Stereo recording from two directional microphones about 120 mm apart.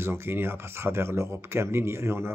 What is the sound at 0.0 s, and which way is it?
Speech, 20° right (ahead or behind).